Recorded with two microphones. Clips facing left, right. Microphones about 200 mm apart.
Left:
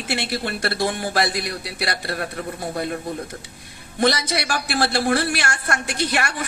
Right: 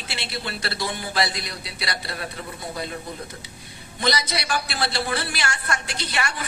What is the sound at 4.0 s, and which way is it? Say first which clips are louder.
A man's voice: left 5 dB; 55° left (ahead or behind).